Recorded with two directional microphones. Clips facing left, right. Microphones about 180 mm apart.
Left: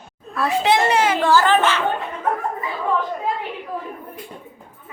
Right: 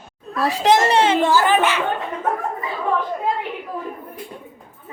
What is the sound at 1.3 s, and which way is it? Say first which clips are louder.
Speech: left 1 dB; 15° right (ahead or behind).